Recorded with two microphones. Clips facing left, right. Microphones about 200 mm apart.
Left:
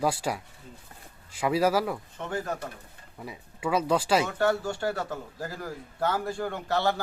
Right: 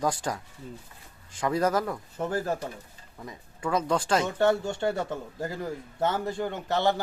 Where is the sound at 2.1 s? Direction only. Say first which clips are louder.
Right 7 dB; 35° right (ahead or behind).